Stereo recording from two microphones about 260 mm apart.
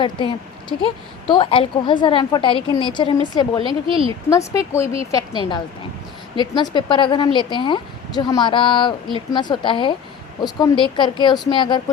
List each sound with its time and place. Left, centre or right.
0.0 s a woman's voice: centre
3.7 s speech: centre
4.3 s speech: centre
6.3 s a woman's voice: centre